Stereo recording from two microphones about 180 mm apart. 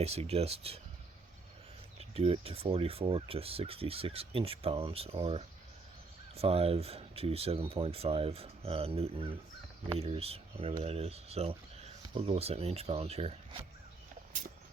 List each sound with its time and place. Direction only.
0.0 s speech: 35° right (ahead or behind)
2.0 s speech: 35° right (ahead or behind)